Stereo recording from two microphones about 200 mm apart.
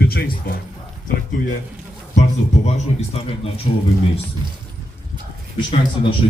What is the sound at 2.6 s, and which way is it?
Speech, 35° left (ahead or behind).